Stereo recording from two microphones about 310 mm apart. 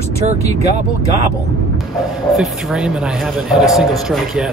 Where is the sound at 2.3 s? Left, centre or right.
Centre.